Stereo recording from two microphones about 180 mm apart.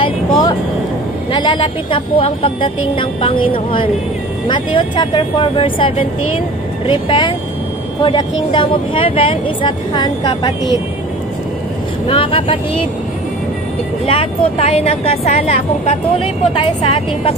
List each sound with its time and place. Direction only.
0.0 s vehicle: 20° left (ahead or behind)
1.3 s speech: 25° left (ahead or behind)
12.1 s speech: 30° left (ahead or behind)
14.0 s speech: 30° left (ahead or behind)